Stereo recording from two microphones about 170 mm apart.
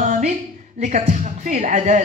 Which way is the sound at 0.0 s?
45° right (ahead or behind).